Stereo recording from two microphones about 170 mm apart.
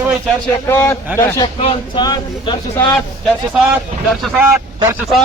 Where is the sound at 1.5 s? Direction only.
35° left (ahead or behind).